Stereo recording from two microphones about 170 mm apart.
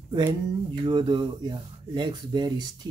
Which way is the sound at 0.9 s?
25° right (ahead or behind).